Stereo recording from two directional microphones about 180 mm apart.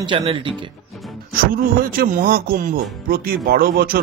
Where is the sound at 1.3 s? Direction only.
50° right (ahead or behind).